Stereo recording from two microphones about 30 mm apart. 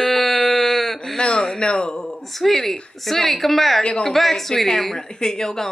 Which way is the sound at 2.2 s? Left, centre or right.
Centre.